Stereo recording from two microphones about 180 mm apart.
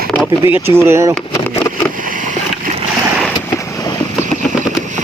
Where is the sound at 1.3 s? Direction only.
15° left (ahead or behind).